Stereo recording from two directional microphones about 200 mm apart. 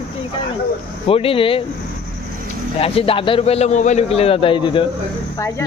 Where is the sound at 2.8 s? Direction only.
30° left (ahead or behind).